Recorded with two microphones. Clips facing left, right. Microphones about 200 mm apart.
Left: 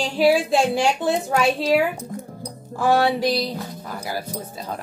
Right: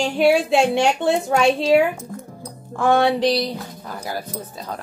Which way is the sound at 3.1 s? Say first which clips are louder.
Right 3 dB; 20° right (ahead or behind).